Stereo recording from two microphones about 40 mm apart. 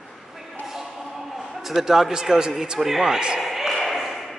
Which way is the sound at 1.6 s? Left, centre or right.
Centre.